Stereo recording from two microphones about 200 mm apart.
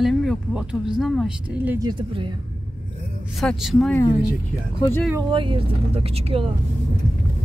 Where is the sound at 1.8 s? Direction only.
25° right (ahead or behind).